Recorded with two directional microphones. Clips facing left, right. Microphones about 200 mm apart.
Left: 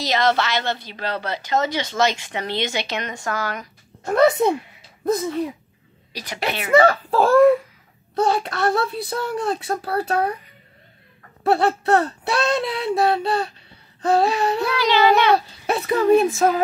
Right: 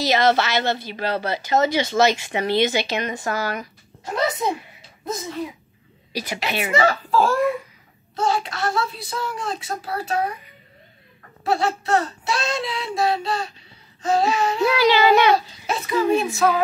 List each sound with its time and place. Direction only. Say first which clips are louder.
0.0 s a woman's voice: right 2 dB; 5° right (ahead or behind)
4.0 s speech: left 8 dB; 55° left (ahead or behind)
6.1 s a woman's voice: right 5 dB; 10° right (ahead or behind)
6.7 s speech: left 5 dB; 55° left (ahead or behind)
11.4 s speech: left 4 dB; 60° left (ahead or behind)
14.8 s a woman's voice: right 1 dB; 5° right (ahead or behind)
15.3 s speech: left 2 dB; 60° left (ahead or behind)